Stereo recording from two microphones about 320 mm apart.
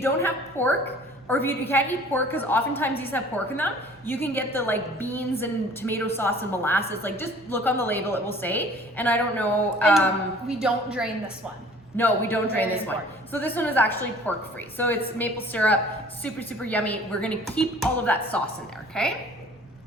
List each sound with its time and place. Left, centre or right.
0.0 s a woman's voice: centre